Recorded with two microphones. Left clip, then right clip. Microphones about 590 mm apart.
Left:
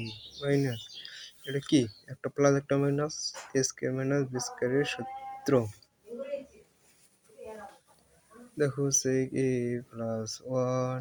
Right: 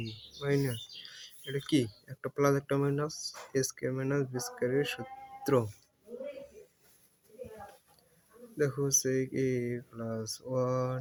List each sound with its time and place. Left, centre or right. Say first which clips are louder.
0.3 s speech: left 2 dB; right
5.4 s music: left 2 dB; right
8.5 s speech: left 1 dB; right